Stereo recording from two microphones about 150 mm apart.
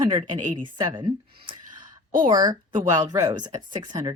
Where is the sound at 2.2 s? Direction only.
30° right (ahead or behind).